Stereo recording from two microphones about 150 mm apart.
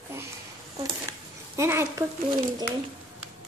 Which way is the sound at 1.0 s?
20° right (ahead or behind).